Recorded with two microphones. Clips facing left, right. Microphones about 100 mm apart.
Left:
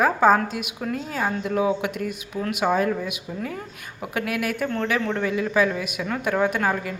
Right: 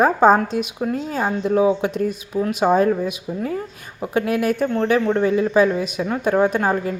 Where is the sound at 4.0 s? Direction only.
30° right (ahead or behind).